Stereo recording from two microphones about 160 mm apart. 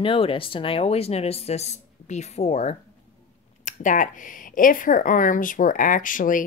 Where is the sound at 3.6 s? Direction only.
50° left (ahead or behind).